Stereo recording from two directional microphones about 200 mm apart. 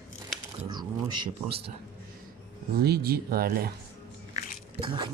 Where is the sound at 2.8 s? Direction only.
50° right (ahead or behind).